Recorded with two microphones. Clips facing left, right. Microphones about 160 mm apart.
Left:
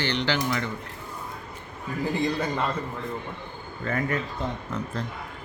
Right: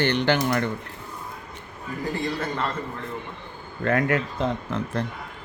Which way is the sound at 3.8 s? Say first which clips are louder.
Right 5 dB; 80° right.